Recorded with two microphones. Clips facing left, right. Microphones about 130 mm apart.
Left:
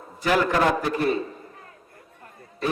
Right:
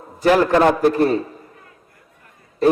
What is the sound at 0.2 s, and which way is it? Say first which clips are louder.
Speech: right 7 dB; 40° right (ahead or behind).